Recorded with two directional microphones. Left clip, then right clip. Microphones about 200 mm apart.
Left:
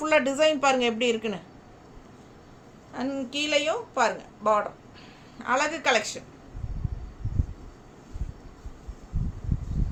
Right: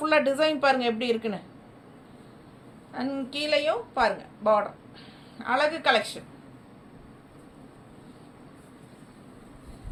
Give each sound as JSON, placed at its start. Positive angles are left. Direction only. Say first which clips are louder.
{"t": 0.0, "sound": "a woman's voice", "louder": "left 1 dB", "side_deg": 25}
{"t": 2.9, "sound": "a woman's voice", "louder": "left 1 dB", "side_deg": 20}